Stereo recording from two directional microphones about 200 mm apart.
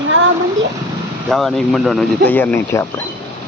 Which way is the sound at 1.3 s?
Centre (ahead or behind).